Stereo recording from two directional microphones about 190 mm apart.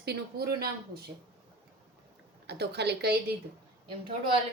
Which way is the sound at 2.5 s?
60° right (ahead or behind).